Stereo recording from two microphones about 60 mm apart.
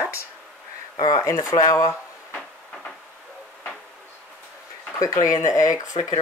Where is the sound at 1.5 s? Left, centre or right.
Left.